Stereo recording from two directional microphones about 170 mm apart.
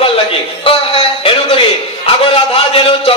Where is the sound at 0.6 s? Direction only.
35° left (ahead or behind).